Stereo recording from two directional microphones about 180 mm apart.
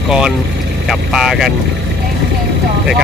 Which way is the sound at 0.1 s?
5° right (ahead or behind).